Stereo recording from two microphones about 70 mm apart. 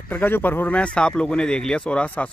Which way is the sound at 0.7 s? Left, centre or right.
Centre.